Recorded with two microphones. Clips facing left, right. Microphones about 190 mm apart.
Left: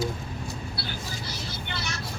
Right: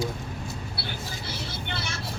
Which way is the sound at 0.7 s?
60° right (ahead or behind).